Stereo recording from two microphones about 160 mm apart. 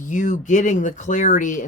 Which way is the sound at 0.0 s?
50° left (ahead or behind).